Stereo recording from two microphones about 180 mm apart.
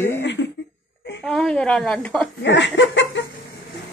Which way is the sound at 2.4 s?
85° left.